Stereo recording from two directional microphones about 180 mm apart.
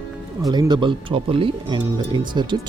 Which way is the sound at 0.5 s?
25° right (ahead or behind).